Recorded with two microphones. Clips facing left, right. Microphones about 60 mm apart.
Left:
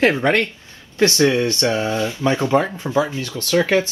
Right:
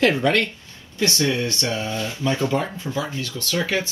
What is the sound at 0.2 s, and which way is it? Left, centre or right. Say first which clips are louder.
Speech: left 2 dB; left.